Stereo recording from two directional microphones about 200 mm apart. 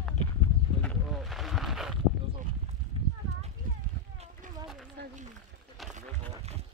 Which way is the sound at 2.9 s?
25° right (ahead or behind).